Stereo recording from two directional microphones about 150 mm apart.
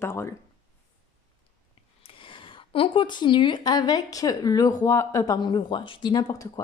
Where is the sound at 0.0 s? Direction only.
15° left (ahead or behind).